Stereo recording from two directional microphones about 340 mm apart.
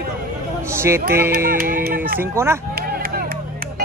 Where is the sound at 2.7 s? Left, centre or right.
Right.